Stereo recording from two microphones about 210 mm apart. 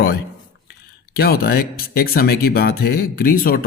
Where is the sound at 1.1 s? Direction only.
45° left (ahead or behind).